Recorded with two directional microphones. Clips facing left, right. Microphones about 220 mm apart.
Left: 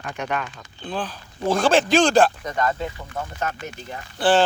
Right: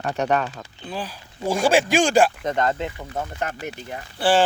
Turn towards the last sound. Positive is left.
turn(degrees=-10)  # may be behind; listen again after turning